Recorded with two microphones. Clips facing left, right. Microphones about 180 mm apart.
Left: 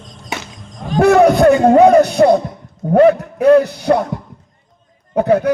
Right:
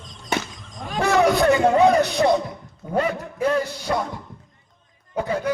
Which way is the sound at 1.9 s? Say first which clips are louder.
Left 8 dB; 55° left (ahead or behind).